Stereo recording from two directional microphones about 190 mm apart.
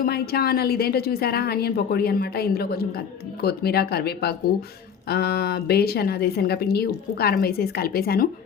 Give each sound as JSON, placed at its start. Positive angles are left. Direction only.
{"t": 0.0, "sound": "a woman's voice", "side_deg": 55}